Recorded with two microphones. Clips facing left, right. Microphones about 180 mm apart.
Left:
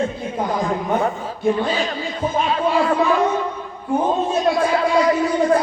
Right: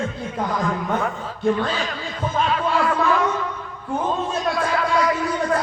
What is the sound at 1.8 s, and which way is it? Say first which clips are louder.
A man's voice: left 4 dB; 20° left (ahead or behind).